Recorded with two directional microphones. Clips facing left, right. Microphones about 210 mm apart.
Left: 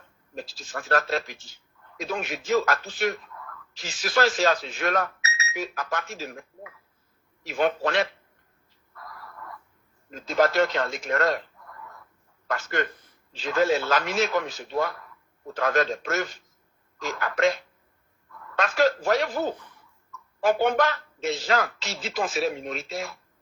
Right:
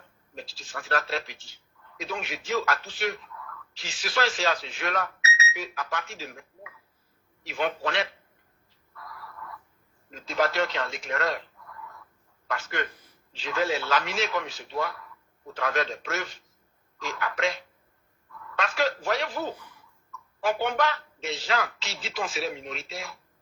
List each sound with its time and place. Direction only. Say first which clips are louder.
0.3 s speech: left 4 dB; 45° left (ahead or behind)
10.1 s speech: left 4 dB; 45° left (ahead or behind)
12.5 s speech: left 4 dB; 45° left (ahead or behind)
20.4 s speech: left 4 dB; 45° left (ahead or behind)